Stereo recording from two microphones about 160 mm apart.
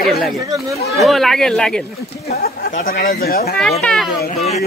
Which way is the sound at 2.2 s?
70° left (ahead or behind).